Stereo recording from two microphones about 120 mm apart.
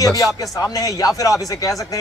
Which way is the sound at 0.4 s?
30° left (ahead or behind).